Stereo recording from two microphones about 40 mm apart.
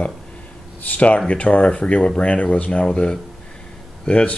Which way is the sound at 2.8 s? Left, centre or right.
Left.